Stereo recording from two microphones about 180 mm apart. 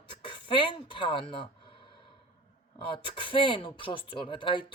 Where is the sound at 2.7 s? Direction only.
25° left (ahead or behind).